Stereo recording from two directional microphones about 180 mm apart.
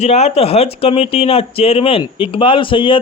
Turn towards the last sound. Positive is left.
turn(degrees=30)  # may be behind; listen again after turning